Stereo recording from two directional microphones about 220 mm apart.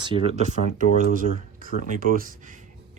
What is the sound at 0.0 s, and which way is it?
Speech, 20° right (ahead or behind).